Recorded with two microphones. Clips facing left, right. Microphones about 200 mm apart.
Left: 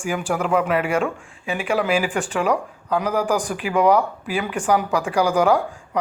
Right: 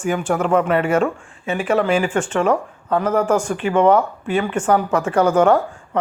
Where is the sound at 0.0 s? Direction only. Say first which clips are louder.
Right 4 dB; centre (ahead or behind).